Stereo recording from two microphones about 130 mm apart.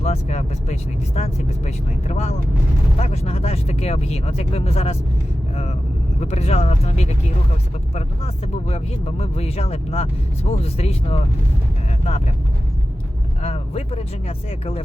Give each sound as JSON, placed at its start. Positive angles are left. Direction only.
{"t": 0.0, "sound": "speech", "side_deg": 60}
{"t": 6.1, "sound": "speech", "side_deg": 55}
{"t": 13.4, "sound": "speech", "side_deg": 50}